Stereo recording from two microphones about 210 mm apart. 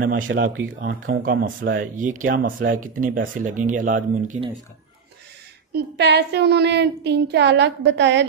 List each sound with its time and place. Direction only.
0.3 s child singing: 50° right (ahead or behind)
0.7 s speech: 40° right (ahead or behind)
5.7 s child singing: 50° right (ahead or behind)